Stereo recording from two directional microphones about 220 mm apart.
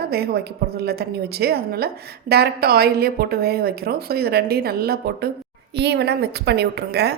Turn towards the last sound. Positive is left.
turn(degrees=-50)  # may be behind; listen again after turning